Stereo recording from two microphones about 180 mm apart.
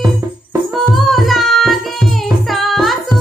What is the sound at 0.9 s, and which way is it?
Music, centre (ahead or behind).